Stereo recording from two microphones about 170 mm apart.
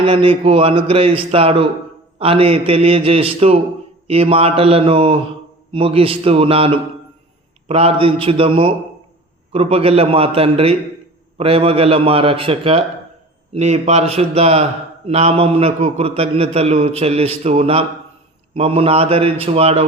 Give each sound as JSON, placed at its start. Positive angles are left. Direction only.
{"t": 0.0, "sound": "a man's voice", "side_deg": -30}